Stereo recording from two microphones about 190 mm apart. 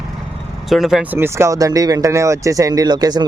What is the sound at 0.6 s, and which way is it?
Speech, centre (ahead or behind).